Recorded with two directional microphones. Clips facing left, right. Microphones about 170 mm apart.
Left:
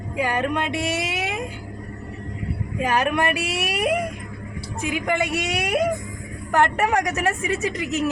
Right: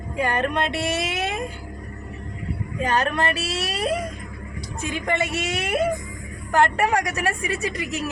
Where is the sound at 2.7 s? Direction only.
10° left (ahead or behind).